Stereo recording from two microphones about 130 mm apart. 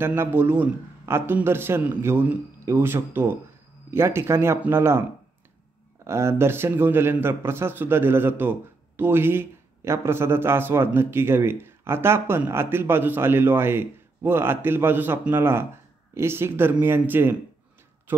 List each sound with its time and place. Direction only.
0.0 s speech: 15° right (ahead or behind)
6.0 s speech: 20° right (ahead or behind)